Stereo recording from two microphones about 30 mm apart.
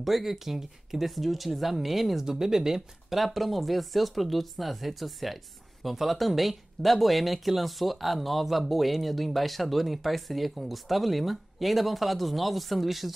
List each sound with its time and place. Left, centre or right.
0.0 s speech: centre
2.2 s speech: centre
3.2 s speech: centre